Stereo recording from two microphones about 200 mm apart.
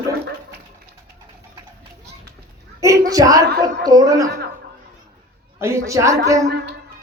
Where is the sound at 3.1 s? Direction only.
15° right (ahead or behind).